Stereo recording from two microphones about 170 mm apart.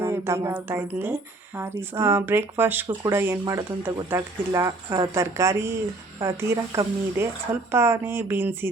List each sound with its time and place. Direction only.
0.0 s speech: 15° right (ahead or behind)